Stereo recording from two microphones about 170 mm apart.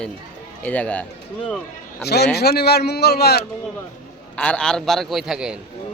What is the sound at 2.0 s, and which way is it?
A man's voice, 70° left (ahead or behind).